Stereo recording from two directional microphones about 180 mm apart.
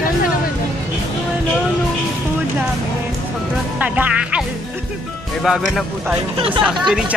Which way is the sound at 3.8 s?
10° right (ahead or behind).